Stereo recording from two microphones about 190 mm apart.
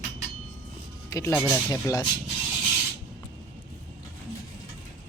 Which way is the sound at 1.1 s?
15° left (ahead or behind).